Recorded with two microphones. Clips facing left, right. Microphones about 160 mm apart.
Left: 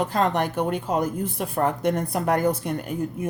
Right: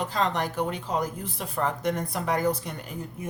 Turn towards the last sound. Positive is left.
turn(degrees=55)  # may be behind; listen again after turning